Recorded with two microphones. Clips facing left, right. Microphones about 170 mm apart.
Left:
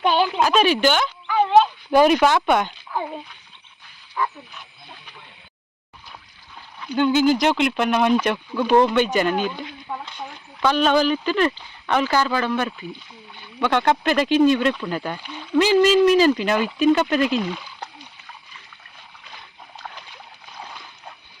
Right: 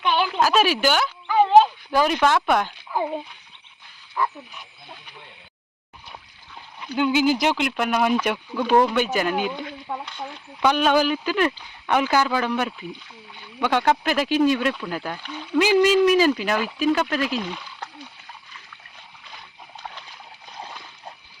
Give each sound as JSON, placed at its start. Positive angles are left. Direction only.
{"t": 0.0, "sound": "a sound", "side_deg": 30}
{"t": 0.4, "sound": "speech", "side_deg": -5}
{"t": 1.9, "sound": "speech", "side_deg": 20}
{"t": 2.2, "sound": "speech", "side_deg": 0}
{"t": 6.7, "sound": "speech", "side_deg": -10}
{"t": 10.6, "sound": "speech", "side_deg": -10}